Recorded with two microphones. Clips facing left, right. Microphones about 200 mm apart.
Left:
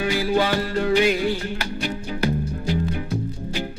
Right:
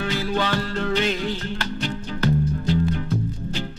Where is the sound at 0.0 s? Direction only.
10° left (ahead or behind).